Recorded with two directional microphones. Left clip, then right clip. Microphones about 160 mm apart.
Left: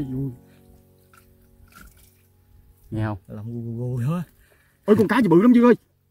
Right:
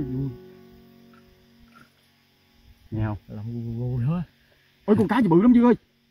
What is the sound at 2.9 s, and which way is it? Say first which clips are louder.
Speech: left 3 dB; 20° left (ahead or behind).